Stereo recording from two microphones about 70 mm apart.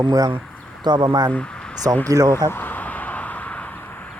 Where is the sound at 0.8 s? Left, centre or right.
Right.